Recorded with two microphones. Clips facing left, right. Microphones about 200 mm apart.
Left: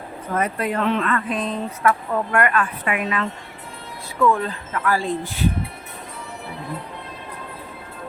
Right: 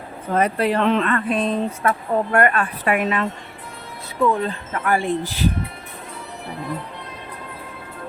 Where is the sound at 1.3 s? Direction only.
65° right (ahead or behind).